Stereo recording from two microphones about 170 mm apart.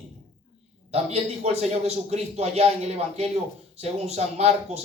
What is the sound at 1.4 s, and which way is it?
Speech, 40° right (ahead or behind).